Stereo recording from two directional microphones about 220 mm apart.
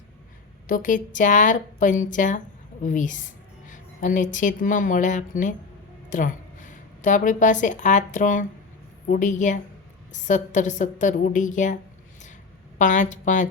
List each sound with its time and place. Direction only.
0.7 s a woman's voice: 35° left (ahead or behind)
12.8 s a woman's voice: 35° left (ahead or behind)